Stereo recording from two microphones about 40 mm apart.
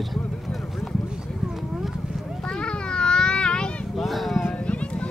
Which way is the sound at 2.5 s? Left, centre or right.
Left.